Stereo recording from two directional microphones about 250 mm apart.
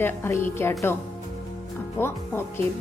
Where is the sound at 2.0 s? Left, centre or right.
Centre.